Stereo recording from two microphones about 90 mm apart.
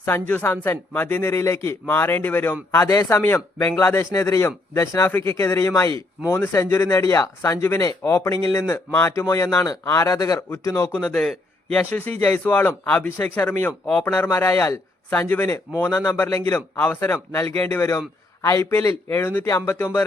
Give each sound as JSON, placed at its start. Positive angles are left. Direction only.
{"t": 0.3, "sound": "speech", "side_deg": 20}
{"t": 2.7, "sound": "speech", "side_deg": 35}
{"t": 10.9, "sound": "a man's voice", "side_deg": 10}
{"t": 11.9, "sound": "speech", "side_deg": 20}
{"t": 15.1, "sound": "speech", "side_deg": 20}